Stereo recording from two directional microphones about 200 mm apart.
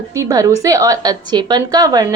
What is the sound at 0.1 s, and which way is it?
A woman's voice, 15° right (ahead or behind).